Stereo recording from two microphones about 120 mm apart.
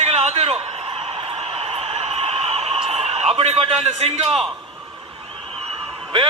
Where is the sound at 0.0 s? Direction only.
60° right (ahead or behind).